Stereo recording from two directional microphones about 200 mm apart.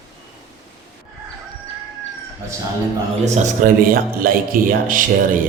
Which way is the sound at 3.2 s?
35° right (ahead or behind).